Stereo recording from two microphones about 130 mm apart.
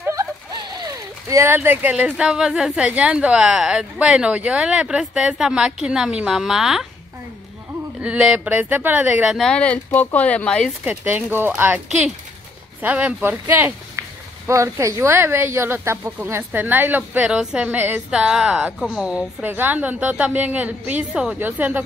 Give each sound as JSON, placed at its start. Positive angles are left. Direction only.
{"t": 0.6, "sound": "speech", "side_deg": -30}
{"t": 8.0, "sound": "speech", "side_deg": -10}
{"t": 9.4, "sound": "speech", "side_deg": 5}
{"t": 11.1, "sound": "speech", "side_deg": -15}
{"t": 12.8, "sound": "speech", "side_deg": -10}